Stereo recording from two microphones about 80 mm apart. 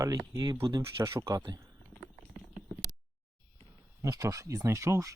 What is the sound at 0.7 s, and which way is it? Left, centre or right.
Speech, right.